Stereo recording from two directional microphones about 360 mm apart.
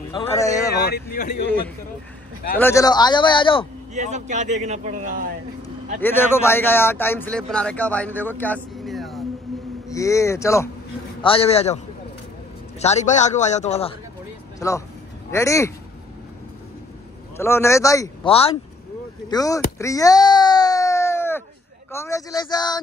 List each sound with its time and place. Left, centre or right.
0.1 s speech: centre
0.7 s a man's voice: left
2.6 s speech: centre
3.9 s speech: centre
5.9 s speech: centre
8.5 s a sound: centre
9.8 s speech: centre
12.8 s a man's voice: centre
15.3 s speech: centre
17.4 s speech: centre
19.2 s wail: centre
21.9 s speech: centre